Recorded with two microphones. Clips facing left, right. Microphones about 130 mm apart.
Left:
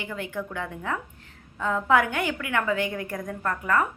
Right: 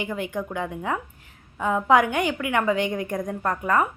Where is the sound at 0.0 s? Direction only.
15° right (ahead or behind).